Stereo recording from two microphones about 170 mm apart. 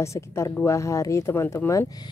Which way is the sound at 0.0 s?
15° left (ahead or behind).